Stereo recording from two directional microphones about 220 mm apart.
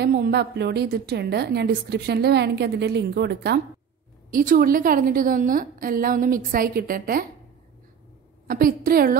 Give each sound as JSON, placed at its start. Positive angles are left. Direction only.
{"t": 0.0, "sound": "a woman's voice", "side_deg": -45}
{"t": 8.5, "sound": "a woman's voice", "side_deg": -40}